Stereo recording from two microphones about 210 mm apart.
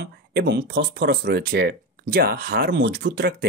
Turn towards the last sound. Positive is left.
turn(degrees=-50)  # may be behind; listen again after turning